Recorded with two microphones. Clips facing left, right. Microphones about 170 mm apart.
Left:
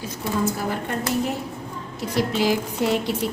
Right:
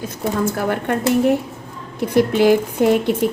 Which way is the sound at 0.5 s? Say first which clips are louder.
Right 6 dB; 65° right (ahead or behind).